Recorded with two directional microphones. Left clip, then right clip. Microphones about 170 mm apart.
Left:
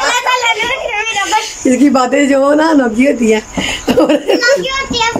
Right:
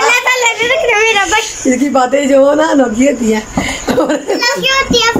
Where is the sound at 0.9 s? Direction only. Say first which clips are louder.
Right 7 dB; 30° right (ahead or behind).